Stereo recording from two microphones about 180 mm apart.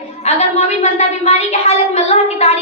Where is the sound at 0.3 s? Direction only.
35° left (ahead or behind).